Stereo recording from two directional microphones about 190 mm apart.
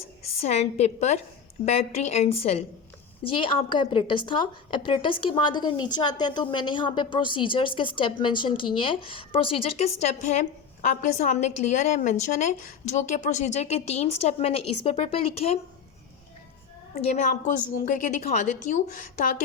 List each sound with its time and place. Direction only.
0.4 s a woman's voice: 35° left (ahead or behind)
17.0 s a woman's voice: 40° left (ahead or behind)